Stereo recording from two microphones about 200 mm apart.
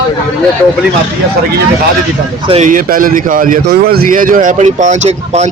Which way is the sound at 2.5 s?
35° right (ahead or behind).